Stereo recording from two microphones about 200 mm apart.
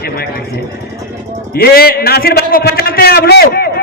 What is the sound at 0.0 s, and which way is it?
Vehicle, 50° left (ahead or behind).